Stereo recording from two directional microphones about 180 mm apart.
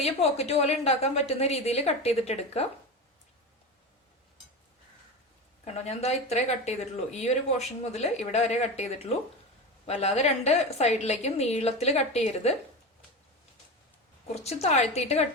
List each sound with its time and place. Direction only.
0.0 s speech: 35° left (ahead or behind)
5.6 s speech: 35° left (ahead or behind)
14.4 s speech: 40° left (ahead or behind)